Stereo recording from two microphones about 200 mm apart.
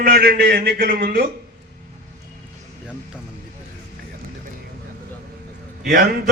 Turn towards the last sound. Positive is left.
turn(degrees=-50)  # may be behind; listen again after turning